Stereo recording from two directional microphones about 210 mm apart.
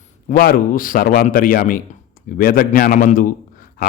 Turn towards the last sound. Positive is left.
turn(degrees=40)  # may be behind; listen again after turning